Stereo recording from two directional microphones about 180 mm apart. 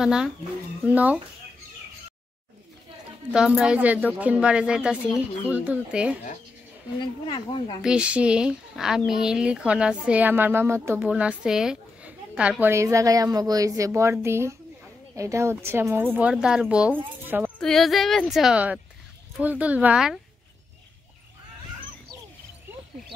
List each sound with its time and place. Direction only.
0.0 s speech: 5° right (ahead or behind)
3.3 s speech: 5° right (ahead or behind)
7.0 s speech: 25° left (ahead or behind)
7.8 s speech: 5° right (ahead or behind)
17.6 s speech: centre (ahead or behind)